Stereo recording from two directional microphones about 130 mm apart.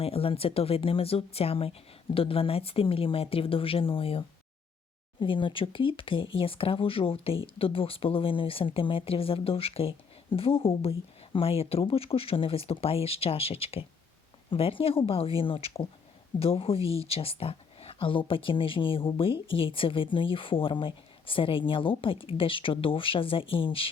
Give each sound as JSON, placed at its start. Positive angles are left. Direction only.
{"t": 0.0, "sound": "speech", "side_deg": 50}
{"t": 5.2, "sound": "speech", "side_deg": 40}